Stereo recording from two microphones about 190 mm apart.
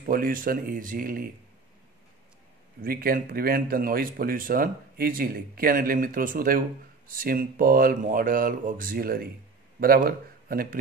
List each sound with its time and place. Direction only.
0.0 s speech: 50° right (ahead or behind)
2.8 s speech: 50° right (ahead or behind)